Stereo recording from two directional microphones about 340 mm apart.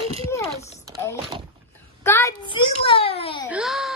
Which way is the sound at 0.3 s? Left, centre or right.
Centre.